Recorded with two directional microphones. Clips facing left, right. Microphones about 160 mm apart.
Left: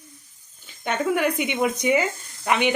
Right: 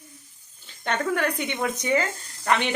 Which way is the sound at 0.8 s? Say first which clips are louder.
Left 3 dB; 10° left (ahead or behind).